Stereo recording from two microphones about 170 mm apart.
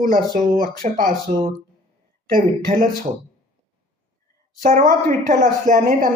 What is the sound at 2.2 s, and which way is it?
Speech, 55° right (ahead or behind).